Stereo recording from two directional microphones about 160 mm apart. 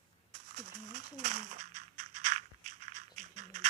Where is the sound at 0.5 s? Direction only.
45° right (ahead or behind).